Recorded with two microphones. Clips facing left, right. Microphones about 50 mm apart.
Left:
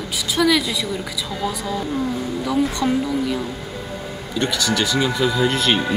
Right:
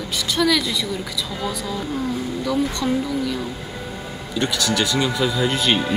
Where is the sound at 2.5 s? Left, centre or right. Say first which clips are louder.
Left 2 dB; centre.